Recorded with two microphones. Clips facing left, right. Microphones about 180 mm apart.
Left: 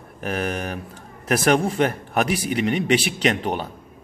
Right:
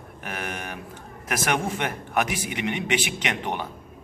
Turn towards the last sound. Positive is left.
turn(degrees=35)  # may be behind; listen again after turning